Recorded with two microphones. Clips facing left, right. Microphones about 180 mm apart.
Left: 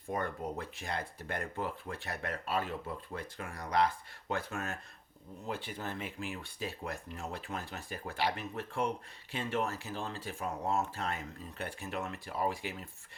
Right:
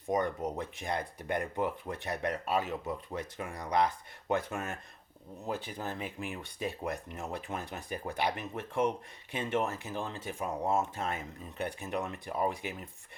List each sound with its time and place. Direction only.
0.1 s speech: 15° right (ahead or behind)
5.5 s speech: 40° right (ahead or behind)
6.3 s speech: 20° right (ahead or behind)